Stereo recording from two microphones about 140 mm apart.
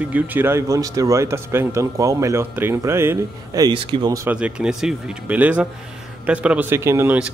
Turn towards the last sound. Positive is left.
turn(degrees=-10)  # may be behind; listen again after turning